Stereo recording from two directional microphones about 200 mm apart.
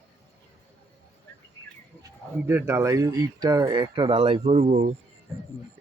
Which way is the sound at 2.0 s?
10° right (ahead or behind).